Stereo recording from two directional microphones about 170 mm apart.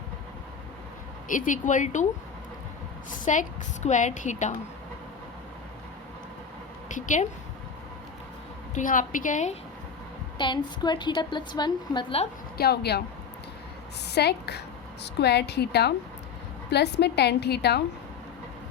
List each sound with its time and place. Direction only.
1.3 s a woman's voice: 50° left (ahead or behind)
3.3 s a woman's voice: 45° left (ahead or behind)
6.8 s a woman's voice: 45° left (ahead or behind)
8.7 s a woman's voice: 50° left (ahead or behind)
10.3 s a woman's voice: 25° left (ahead or behind)
12.5 s a woman's voice: 70° left (ahead or behind)
14.1 s a woman's voice: 75° left (ahead or behind)